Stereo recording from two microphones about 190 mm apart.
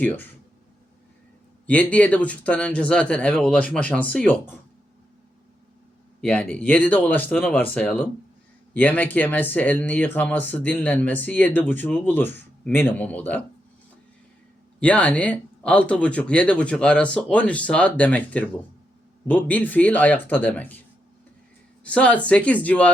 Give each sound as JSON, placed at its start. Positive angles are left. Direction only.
{"t": 0.0, "sound": "speech", "side_deg": 10}
{"t": 1.6, "sound": "speech", "side_deg": 5}
{"t": 6.2, "sound": "speech", "side_deg": 5}
{"t": 14.8, "sound": "speech", "side_deg": 5}
{"t": 21.8, "sound": "speech", "side_deg": 5}